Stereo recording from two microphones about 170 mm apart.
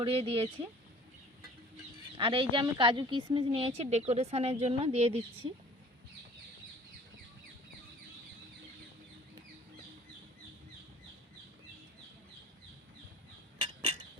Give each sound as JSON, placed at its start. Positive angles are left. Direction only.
{"t": 0.0, "sound": "a woman's voice", "side_deg": -35}
{"t": 2.1, "sound": "a woman's voice", "side_deg": -30}